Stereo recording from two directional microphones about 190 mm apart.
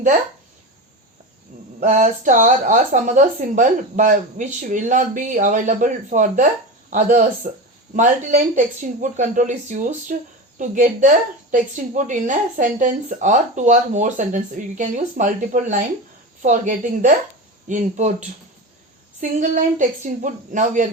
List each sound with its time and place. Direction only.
1.8 s speech: 40° right (ahead or behind)